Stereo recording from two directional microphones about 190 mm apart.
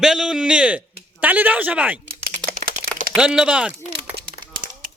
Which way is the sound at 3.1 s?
5° right (ahead or behind).